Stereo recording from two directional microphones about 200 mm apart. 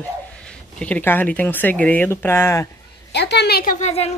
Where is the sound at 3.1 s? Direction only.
55° left (ahead or behind); by 4.1 s 30° left (ahead or behind).